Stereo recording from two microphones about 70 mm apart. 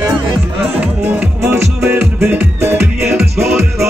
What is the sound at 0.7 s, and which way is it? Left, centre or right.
Music, right.